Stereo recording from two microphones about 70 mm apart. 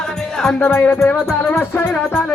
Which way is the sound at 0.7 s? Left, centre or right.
Left.